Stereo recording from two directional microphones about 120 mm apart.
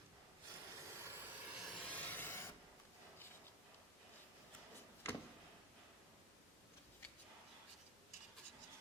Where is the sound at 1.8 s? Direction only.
15° left (ahead or behind).